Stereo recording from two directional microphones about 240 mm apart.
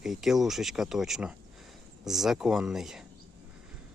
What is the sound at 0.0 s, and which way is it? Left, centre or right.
Speech, centre.